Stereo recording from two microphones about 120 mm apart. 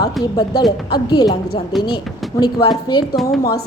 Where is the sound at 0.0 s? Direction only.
30° left (ahead or behind).